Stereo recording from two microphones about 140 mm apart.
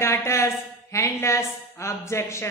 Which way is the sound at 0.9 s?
20° left (ahead or behind).